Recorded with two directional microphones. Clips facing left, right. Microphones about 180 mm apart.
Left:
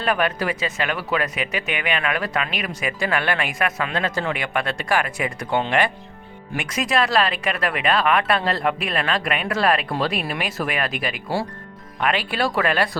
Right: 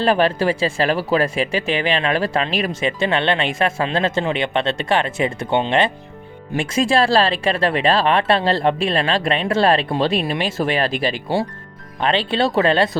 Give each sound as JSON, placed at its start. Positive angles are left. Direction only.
{"t": 0.0, "sound": "speech", "side_deg": -30}